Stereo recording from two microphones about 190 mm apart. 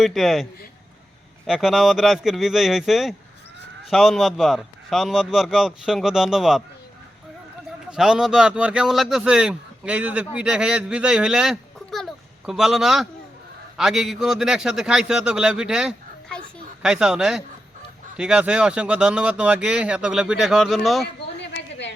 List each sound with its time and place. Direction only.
0.0 s speech: centre (ahead or behind)
1.5 s speech: centre (ahead or behind)
7.9 s speech: 5° right (ahead or behind)
21.4 s a sound: 65° left (ahead or behind)